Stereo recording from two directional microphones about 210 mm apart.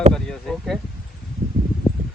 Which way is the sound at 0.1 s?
Centre (ahead or behind).